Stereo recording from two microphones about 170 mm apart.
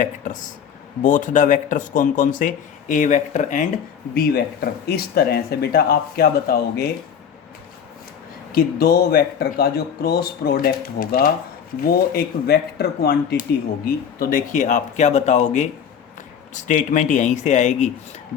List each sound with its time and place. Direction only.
1.0 s speech: 50° left (ahead or behind)
4.1 s speech: 65° left (ahead or behind)
8.5 s speech: 65° left (ahead or behind); by 17.9 s 45° left (ahead or behind)